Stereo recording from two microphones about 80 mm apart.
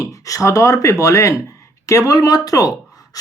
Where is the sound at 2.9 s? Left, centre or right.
Left.